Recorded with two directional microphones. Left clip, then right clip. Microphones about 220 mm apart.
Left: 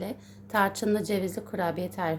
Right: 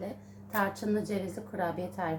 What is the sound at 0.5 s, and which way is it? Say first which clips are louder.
A woman's voice: left 5 dB; 45° left (ahead or behind).